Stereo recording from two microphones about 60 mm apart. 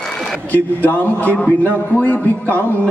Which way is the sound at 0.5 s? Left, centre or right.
Left.